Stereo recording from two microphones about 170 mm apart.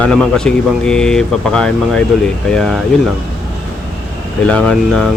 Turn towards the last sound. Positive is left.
turn(degrees=5)  # may be behind; listen again after turning